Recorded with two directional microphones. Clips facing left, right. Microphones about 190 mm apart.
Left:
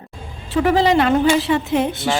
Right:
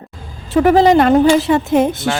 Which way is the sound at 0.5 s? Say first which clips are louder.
Right 5 dB; 45° right (ahead or behind).